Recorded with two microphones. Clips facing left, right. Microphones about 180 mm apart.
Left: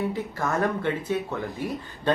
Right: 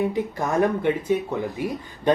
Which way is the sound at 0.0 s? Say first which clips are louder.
Right 4 dB; 15° right (ahead or behind).